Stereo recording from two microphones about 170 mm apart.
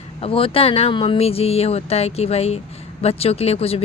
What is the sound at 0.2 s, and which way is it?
Speech, 35° left (ahead or behind).